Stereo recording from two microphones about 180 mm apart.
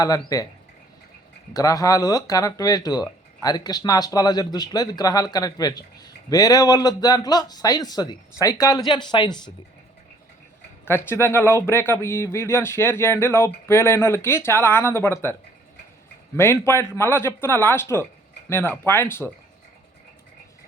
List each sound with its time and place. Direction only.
0.0 s speech: 20° left (ahead or behind)
1.5 s speech: 20° left (ahead or behind)
10.8 s speech: 15° left (ahead or behind)